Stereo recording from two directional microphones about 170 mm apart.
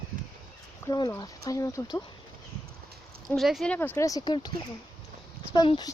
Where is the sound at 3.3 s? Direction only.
Centre (ahead or behind); by 4.5 s 25° left (ahead or behind).